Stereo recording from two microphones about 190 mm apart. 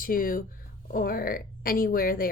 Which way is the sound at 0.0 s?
45° left (ahead or behind).